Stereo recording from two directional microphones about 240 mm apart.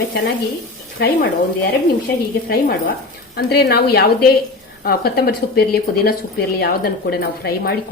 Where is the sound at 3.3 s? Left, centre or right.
Left.